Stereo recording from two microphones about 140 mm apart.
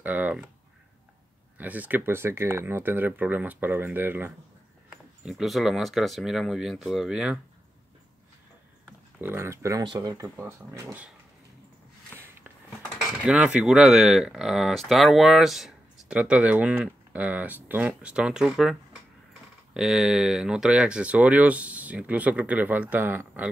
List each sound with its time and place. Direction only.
0.0 s speech: 10° right (ahead or behind)
1.6 s speech: 10° right (ahead or behind)
4.8 s speech: 5° right (ahead or behind)
9.2 s speech: 15° right (ahead or behind)
13.2 s speech: 10° right (ahead or behind)